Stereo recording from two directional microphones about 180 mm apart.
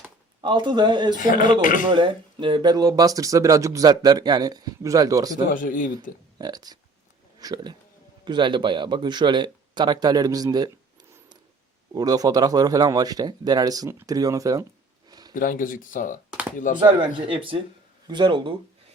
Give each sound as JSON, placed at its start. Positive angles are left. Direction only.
{"t": 0.4, "sound": "speech", "side_deg": -25}
{"t": 1.1, "sound": "speech", "side_deg": 45}
{"t": 1.9, "sound": "speech", "side_deg": -25}
{"t": 5.5, "sound": "speech", "side_deg": 50}
{"t": 6.4, "sound": "speech", "side_deg": -20}
{"t": 11.9, "sound": "speech", "side_deg": -20}
{"t": 15.4, "sound": "speech", "side_deg": 50}
{"t": 17.2, "sound": "speech", "side_deg": -30}